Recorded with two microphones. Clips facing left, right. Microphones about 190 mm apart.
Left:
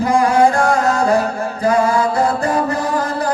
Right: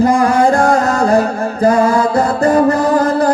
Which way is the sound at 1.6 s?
45° right (ahead or behind).